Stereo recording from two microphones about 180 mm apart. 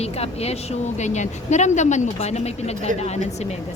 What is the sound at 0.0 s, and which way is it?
Speech, 35° left (ahead or behind).